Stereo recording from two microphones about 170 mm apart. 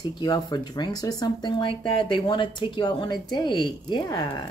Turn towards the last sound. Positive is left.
turn(degrees=25)  # may be behind; listen again after turning